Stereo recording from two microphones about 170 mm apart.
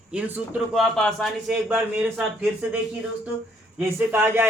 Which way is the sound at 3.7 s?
15° right (ahead or behind).